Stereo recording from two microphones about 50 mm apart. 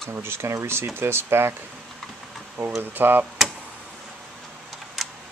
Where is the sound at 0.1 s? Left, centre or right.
Right.